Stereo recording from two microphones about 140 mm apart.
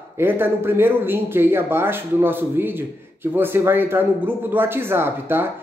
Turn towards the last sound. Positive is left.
turn(degrees=-15)  # may be behind; listen again after turning